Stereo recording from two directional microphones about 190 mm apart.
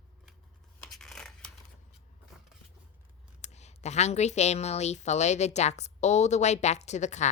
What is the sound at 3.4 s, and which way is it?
A woman's voice, 35° left (ahead or behind).